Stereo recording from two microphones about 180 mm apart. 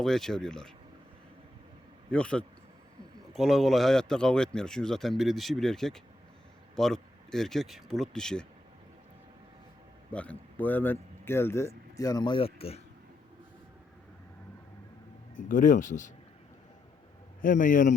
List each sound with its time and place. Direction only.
0.0 s a man's voice: centre (ahead or behind)
2.0 s a man's voice: 5° left (ahead or behind)
10.1 s a man's voice: 10° left (ahead or behind); by 12.8 s 35° left (ahead or behind)
15.4 s speech: 45° left (ahead or behind)
17.4 s speech: 50° left (ahead or behind)